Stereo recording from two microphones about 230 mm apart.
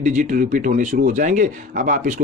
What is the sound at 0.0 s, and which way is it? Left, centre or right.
Speech, right.